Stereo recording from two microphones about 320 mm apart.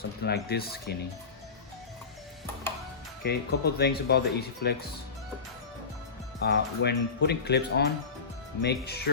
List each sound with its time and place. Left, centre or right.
0.2 s speech: left
3.2 s speech: left
6.4 s speech: left